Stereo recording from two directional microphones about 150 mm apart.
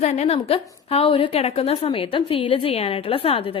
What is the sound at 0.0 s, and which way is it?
A woman's voice, 45° left (ahead or behind).